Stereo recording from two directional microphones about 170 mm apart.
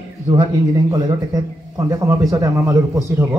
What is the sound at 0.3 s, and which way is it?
A man's voice, 20° right (ahead or behind).